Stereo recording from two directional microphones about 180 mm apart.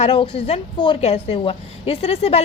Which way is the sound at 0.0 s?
35° left (ahead or behind).